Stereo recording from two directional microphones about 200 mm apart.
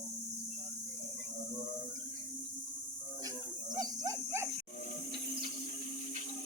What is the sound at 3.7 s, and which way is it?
Cricket, 20° right (ahead or behind).